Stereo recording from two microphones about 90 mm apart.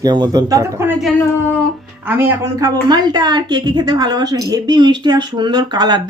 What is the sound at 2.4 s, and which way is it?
A woman's voice, 40° right (ahead or behind).